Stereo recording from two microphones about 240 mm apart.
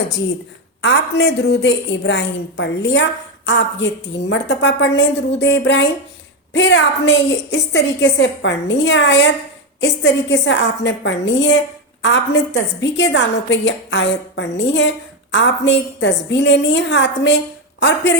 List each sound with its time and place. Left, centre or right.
0.8 s a woman's voice: left